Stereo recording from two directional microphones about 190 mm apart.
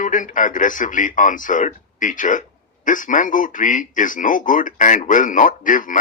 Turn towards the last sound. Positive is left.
turn(degrees=45)  # may be behind; listen again after turning